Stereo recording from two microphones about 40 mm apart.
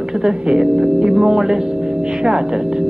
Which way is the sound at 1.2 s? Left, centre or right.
Centre.